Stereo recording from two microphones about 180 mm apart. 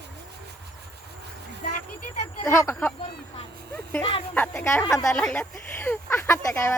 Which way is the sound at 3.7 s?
10° left (ahead or behind).